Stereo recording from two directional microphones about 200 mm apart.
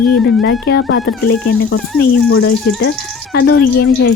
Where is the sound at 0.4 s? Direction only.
55° left (ahead or behind).